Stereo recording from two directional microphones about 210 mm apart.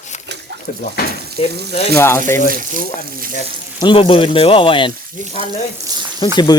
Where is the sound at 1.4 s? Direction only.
25° left (ahead or behind).